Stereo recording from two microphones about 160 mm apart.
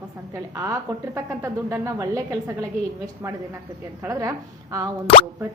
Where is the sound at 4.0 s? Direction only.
20° right (ahead or behind).